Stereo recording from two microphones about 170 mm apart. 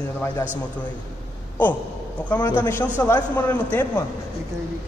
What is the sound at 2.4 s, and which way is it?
Speech, 10° left (ahead or behind).